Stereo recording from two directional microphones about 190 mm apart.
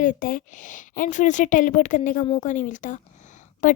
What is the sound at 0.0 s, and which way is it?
A woman's voice, 45° left (ahead or behind).